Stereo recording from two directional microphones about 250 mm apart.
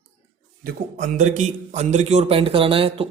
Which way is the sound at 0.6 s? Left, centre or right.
Right.